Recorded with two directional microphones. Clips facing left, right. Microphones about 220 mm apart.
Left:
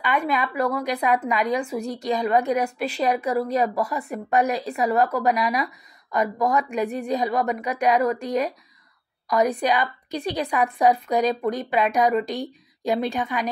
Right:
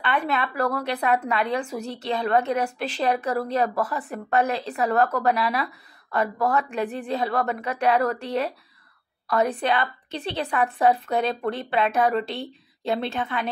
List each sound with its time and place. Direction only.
0.0 s speech: 10° left (ahead or behind)